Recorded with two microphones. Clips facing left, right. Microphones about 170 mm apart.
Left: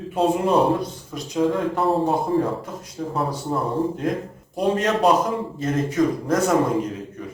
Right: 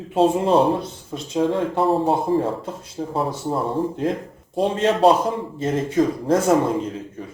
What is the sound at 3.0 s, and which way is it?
Speech, 35° right (ahead or behind).